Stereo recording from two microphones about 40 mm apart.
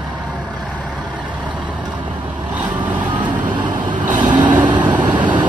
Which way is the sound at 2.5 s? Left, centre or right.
Right.